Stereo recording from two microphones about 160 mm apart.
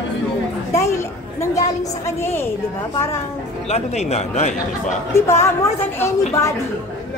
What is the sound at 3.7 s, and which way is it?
Speech, 40° left (ahead or behind).